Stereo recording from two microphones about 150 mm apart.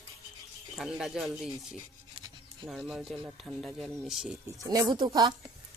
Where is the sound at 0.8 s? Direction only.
Centre (ahead or behind).